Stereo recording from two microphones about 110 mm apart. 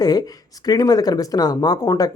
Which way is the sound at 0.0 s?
35° left (ahead or behind).